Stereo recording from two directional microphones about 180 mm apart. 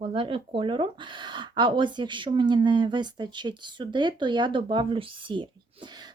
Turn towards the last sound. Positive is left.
turn(degrees=-25)  # may be behind; listen again after turning